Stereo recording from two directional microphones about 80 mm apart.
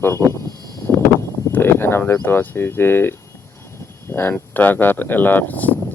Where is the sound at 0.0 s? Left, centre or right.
Left.